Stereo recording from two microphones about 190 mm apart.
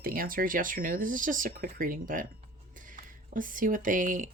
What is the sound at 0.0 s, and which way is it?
Speech, 50° right (ahead or behind).